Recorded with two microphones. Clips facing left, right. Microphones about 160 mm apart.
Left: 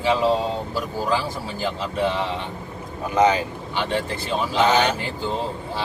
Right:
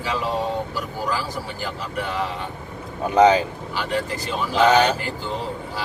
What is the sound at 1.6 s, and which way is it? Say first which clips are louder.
Speech: left 7 dB; 25° left (ahead or behind).